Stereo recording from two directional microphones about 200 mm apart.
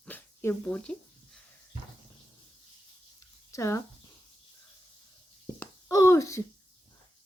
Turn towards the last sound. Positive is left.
turn(degrees=15)  # may be behind; listen again after turning